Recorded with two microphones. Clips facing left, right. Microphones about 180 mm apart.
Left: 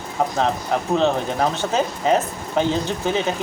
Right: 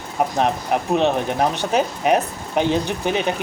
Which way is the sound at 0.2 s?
20° right (ahead or behind).